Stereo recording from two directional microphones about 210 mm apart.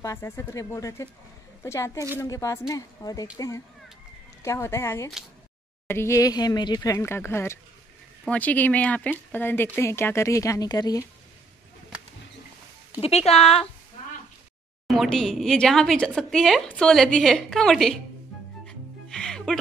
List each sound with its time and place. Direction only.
0.0 s speech: 15° left (ahead or behind)
13.0 s speech: 30° left (ahead or behind)
14.9 s speech: centre (ahead or behind)
18.7 s music: 5° left (ahead or behind)